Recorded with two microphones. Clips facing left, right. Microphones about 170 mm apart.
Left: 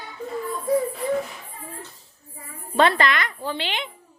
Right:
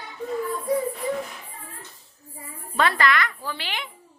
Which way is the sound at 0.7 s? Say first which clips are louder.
Left 4 dB; centre (ahead or behind).